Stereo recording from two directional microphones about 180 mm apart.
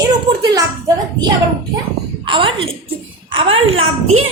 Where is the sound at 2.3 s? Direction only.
30° right (ahead or behind).